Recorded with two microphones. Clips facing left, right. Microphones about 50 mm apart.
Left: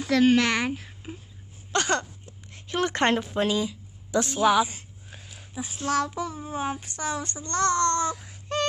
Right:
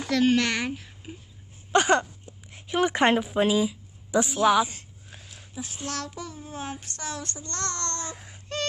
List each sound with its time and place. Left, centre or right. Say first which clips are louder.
0.0 s a child's voice: left 2 dB; centre
1.7 s speech: right 4 dB; centre
4.4 s a sound: left 1 dB; centre
5.5 s speech: left 2 dB; centre
5.9 s child singing: left 10 dB; centre